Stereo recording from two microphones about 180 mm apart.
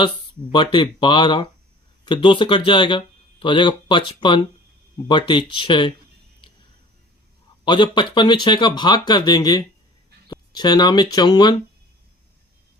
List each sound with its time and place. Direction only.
0.5 s speech: 25° left (ahead or behind)
7.6 s speech: 25° left (ahead or behind)